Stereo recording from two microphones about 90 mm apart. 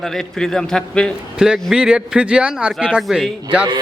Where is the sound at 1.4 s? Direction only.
10° right (ahead or behind).